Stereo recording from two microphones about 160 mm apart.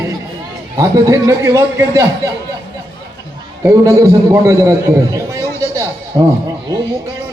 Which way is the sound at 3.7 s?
20° right (ahead or behind).